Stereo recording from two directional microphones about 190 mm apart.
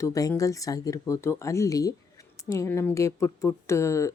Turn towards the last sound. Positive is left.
turn(degrees=15)  # may be behind; listen again after turning